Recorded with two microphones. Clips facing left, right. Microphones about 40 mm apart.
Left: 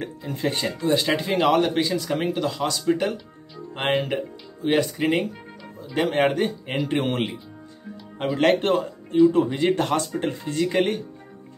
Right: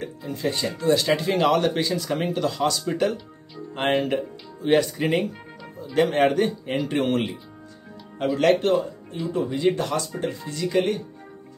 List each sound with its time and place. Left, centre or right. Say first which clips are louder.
0.3 s speech: even; left
0.7 s speech: right 3 dB; centre
6.9 s speech: right 1 dB; centre
8.4 s speech: even; left